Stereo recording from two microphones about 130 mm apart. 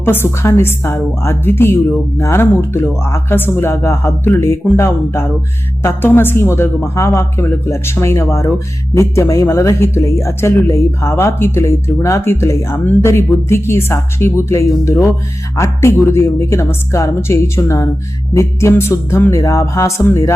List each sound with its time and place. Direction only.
0.0 s a woman's voice: 15° left (ahead or behind)